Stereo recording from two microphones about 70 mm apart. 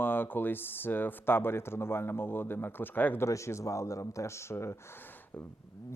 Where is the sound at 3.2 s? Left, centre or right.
Left.